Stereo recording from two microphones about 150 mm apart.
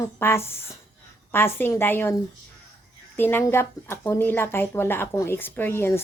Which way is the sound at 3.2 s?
15° left (ahead or behind).